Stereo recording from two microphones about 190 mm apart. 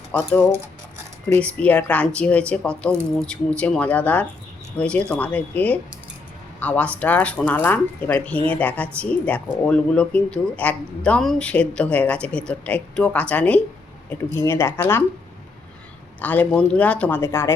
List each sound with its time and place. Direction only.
0.1 s speech: 10° left (ahead or behind)
16.2 s speech: 10° left (ahead or behind)